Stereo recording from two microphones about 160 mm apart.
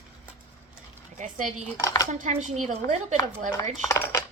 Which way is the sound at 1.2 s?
55° right (ahead or behind).